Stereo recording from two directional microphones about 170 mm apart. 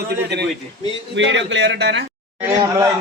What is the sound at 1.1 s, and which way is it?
Speech, 90° right.